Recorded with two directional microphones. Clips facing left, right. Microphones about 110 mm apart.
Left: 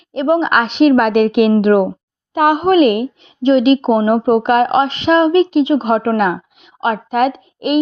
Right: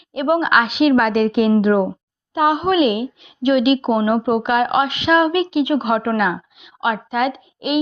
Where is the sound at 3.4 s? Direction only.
35° left (ahead or behind).